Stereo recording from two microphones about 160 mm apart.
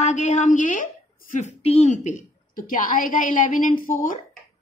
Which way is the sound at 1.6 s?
45° left (ahead or behind).